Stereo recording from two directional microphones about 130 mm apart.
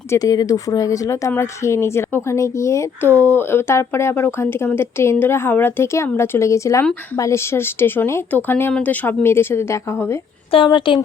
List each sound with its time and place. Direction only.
0.1 s a woman's voice: 30° left (ahead or behind)
10.5 s a woman's voice: 40° left (ahead or behind)